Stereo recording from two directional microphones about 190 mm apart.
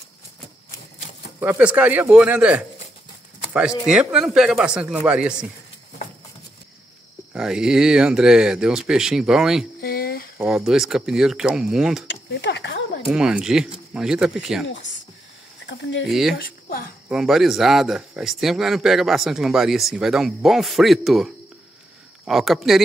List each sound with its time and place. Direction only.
1.4 s speech: 10° right (ahead or behind)
3.8 s speech: 5° right (ahead or behind)
7.3 s speech: 5° right (ahead or behind)
9.8 s a sound: 55° left (ahead or behind)
10.4 s speech: 5° right (ahead or behind)
12.1 s a sound: 65° left (ahead or behind)
13.1 s speech: 5° right (ahead or behind)
15.6 s speech: 65° left (ahead or behind)
16.1 s speech: centre (ahead or behind)
16.3 s a sound: 50° left (ahead or behind)
17.1 s speech: centre (ahead or behind)